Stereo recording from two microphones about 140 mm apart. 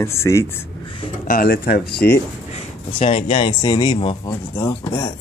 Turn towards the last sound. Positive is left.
turn(degrees=20)  # may be behind; listen again after turning